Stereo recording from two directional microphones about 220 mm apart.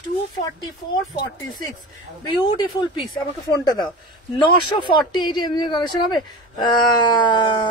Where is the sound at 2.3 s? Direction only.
20° left (ahead or behind).